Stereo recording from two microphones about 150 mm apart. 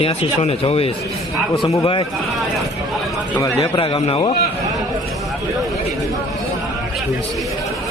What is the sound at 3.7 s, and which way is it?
Speech, 40° left (ahead or behind).